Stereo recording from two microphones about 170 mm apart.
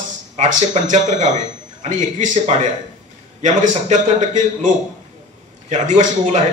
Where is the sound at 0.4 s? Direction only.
45° right (ahead or behind).